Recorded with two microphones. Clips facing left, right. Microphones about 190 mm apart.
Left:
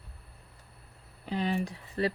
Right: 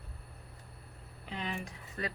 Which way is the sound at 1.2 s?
35° left (ahead or behind).